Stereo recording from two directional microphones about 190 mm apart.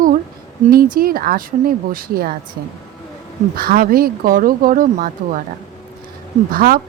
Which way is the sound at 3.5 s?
50° right (ahead or behind).